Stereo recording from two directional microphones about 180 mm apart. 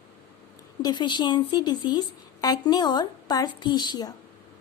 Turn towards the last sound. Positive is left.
turn(degrees=20)  # may be behind; listen again after turning